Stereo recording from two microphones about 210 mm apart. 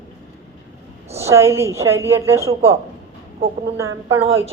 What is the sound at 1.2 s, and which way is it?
Speech, 15° right (ahead or behind).